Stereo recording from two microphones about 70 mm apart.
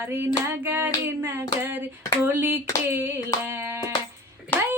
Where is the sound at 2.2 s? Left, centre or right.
Right.